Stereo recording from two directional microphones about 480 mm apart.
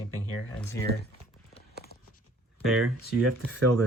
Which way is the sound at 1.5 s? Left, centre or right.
Centre.